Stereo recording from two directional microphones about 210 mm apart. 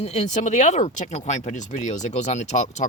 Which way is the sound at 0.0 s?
30° left (ahead or behind).